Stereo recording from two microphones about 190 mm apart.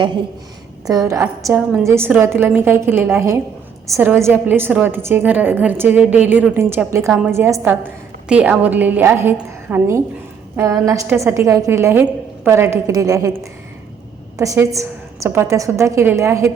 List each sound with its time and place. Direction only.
0.9 s a woman's voice: 20° right (ahead or behind)